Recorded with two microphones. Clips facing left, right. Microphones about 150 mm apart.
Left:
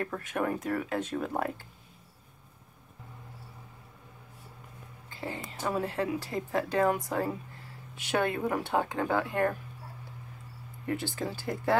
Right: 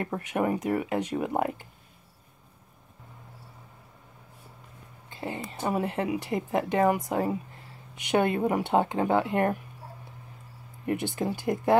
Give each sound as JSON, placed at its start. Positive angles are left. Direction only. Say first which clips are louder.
{"t": 0.0, "sound": "speech", "louder": "right 4 dB", "side_deg": -15}
{"t": 5.1, "sound": "a sound", "louder": "right 3 dB", "side_deg": -20}
{"t": 5.5, "sound": "speech", "louder": "right 3 dB", "side_deg": -20}
{"t": 10.9, "sound": "speech", "louder": "right 4 dB", "side_deg": -20}